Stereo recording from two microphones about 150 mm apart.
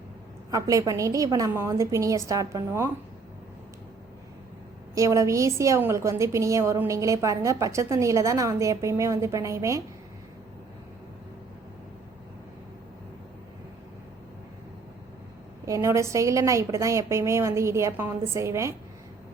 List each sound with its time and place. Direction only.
0.5 s a woman's voice: 20° right (ahead or behind)
4.9 s a woman's voice: 20° right (ahead or behind)
15.6 s a woman's voice: 20° right (ahead or behind)